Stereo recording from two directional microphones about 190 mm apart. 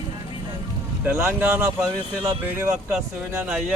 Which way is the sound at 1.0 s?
10° right (ahead or behind).